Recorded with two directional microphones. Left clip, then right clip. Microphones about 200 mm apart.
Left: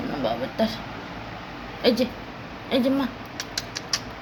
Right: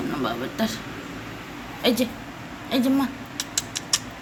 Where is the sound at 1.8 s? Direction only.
20° left (ahead or behind).